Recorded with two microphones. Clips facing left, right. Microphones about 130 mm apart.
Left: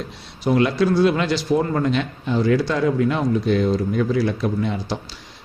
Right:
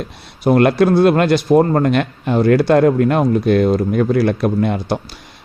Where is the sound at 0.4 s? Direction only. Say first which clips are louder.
Right 6 dB; 60° right (ahead or behind).